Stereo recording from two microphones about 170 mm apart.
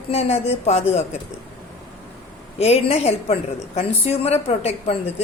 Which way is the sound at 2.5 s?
35° left (ahead or behind).